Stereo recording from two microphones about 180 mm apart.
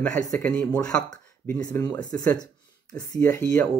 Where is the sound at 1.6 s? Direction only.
20° left (ahead or behind).